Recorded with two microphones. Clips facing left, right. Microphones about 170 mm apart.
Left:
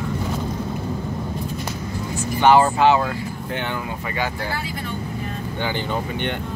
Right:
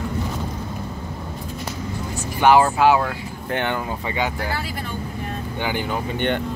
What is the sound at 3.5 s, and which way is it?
Speech, 60° right (ahead or behind).